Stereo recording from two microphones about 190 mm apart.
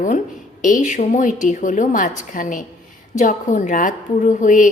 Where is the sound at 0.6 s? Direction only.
40° left (ahead or behind).